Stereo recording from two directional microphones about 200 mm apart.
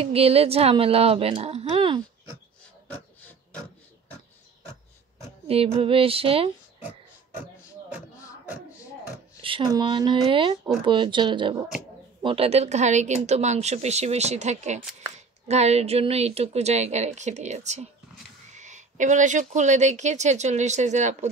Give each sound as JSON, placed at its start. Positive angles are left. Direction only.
{"t": 0.0, "sound": "a woman's voice", "side_deg": -30}
{"t": 5.8, "sound": "a woman's voice", "side_deg": -30}
{"t": 9.4, "sound": "a woman's voice", "side_deg": -25}